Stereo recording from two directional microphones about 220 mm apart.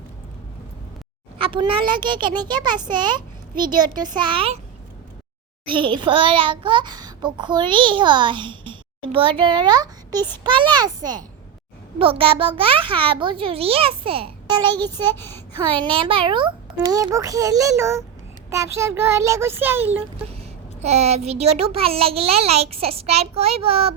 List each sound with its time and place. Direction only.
1.4 s a child's voice: 25° right (ahead or behind)
5.6 s a child's voice: 20° right (ahead or behind)
15.1 s speech: 10° left (ahead or behind)
15.6 s a child's voice: 20° right (ahead or behind)
20.8 s a child's voice: 30° right (ahead or behind)